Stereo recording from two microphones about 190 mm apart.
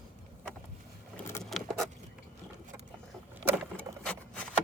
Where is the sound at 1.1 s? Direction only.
10° left (ahead or behind).